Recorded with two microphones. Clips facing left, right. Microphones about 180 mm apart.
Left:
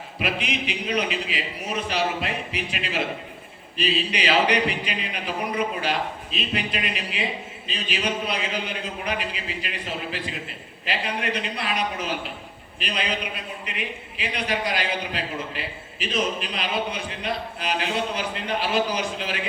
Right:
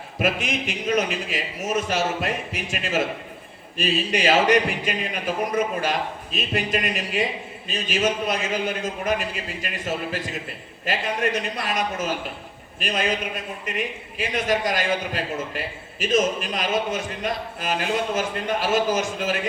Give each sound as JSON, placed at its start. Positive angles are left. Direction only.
{"t": 0.2, "sound": "a man's voice", "side_deg": -45}